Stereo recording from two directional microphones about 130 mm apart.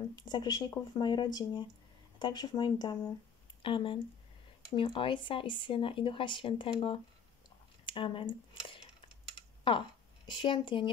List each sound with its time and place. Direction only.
0.1 s speech: 35° left (ahead or behind)